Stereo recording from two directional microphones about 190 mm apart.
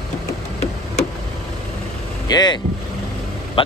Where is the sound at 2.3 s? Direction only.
20° left (ahead or behind).